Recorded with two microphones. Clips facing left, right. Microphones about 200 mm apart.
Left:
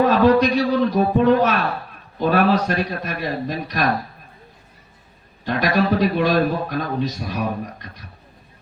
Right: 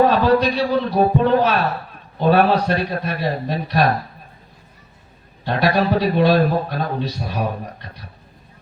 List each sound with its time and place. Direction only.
0.3 s a man's voice: 35° right (ahead or behind)
5.5 s a man's voice: 35° right (ahead or behind)